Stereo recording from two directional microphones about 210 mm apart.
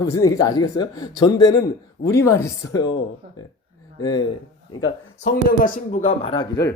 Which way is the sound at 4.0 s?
20° left (ahead or behind).